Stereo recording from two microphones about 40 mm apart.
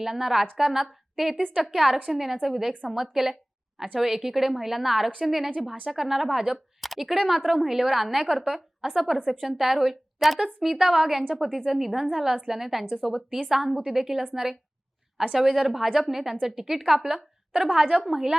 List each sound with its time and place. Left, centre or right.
0.0 s a woman's voice: centre
15.3 s a woman's voice: centre